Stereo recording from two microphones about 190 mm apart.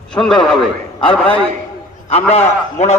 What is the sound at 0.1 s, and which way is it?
A man's voice, 5° left (ahead or behind).